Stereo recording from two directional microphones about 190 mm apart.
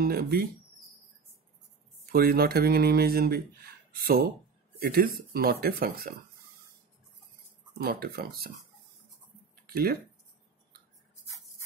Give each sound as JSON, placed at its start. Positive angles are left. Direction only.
{"t": 0.0, "sound": "speech", "side_deg": -55}
{"t": 2.1, "sound": "speech", "side_deg": -55}
{"t": 7.8, "sound": "speech", "side_deg": -50}
{"t": 9.7, "sound": "speech", "side_deg": -55}